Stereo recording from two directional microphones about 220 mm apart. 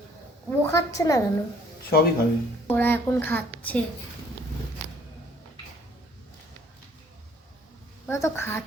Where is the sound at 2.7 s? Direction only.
10° left (ahead or behind).